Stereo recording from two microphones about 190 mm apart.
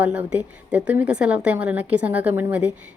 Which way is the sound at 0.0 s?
5° right (ahead or behind).